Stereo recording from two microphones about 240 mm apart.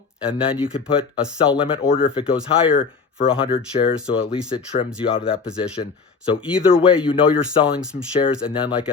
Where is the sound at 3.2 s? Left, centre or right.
Left.